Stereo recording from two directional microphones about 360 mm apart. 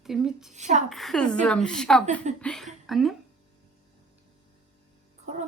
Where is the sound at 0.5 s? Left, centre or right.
Centre.